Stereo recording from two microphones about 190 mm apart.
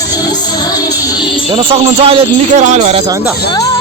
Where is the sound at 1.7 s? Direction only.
30° right (ahead or behind).